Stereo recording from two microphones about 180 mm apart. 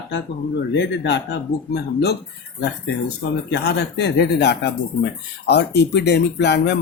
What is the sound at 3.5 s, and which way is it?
Speech, 65° left (ahead or behind).